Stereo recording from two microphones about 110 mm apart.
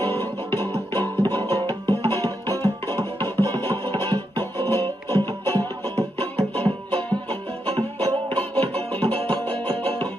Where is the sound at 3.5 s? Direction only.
35° right (ahead or behind).